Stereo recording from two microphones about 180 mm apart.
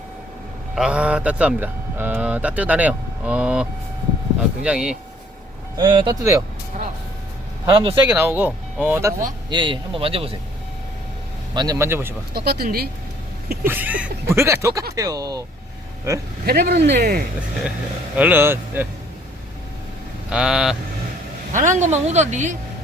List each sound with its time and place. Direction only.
0.8 s speech: 5° right (ahead or behind)
5.7 s speech: 25° right (ahead or behind)
7.6 s speech: 25° right (ahead or behind)
8.1 s speech: 15° right (ahead or behind)
9.5 s a woman's voice: 25° right (ahead or behind)
11.5 s speech: 20° right (ahead or behind)
12.3 s speech: 60° right (ahead or behind)
13.7 s speech: 10° right (ahead or behind)
16.5 s speech: 60° right (ahead or behind)
17.0 s speech: 50° right (ahead or behind)
18.2 s speech: 10° right (ahead or behind)
20.3 s speech: 5° right (ahead or behind)
21.5 s a woman's voice: 45° right (ahead or behind)